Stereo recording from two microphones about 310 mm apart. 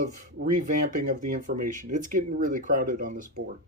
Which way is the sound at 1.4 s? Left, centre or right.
Right.